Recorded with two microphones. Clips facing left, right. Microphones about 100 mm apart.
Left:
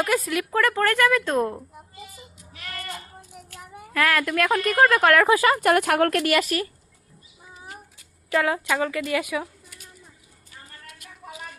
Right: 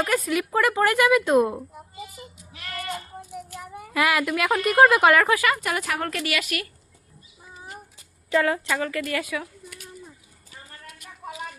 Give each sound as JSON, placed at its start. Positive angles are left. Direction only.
{"t": 0.0, "sound": "a woman's voice", "side_deg": 0}
{"t": 3.5, "sound": "a woman's voice", "side_deg": -10}
{"t": 5.3, "sound": "speech", "side_deg": 30}
{"t": 5.5, "sound": "a woman's voice", "side_deg": 55}
{"t": 8.3, "sound": "speech", "side_deg": 15}
{"t": 9.1, "sound": "speech", "side_deg": 20}